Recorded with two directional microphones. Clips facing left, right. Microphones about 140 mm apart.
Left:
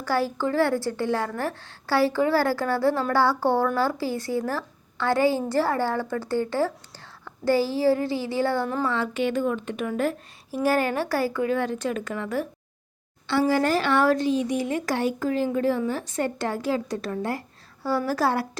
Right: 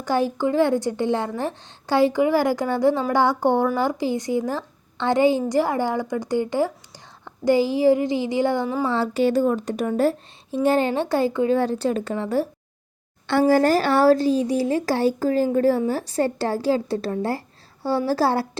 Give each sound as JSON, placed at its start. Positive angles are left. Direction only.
{"t": 0.0, "sound": "a woman's voice", "side_deg": -20}
{"t": 8.8, "sound": "a woman's voice", "side_deg": -30}